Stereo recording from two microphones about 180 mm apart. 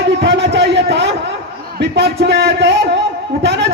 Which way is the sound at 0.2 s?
75° right (ahead or behind).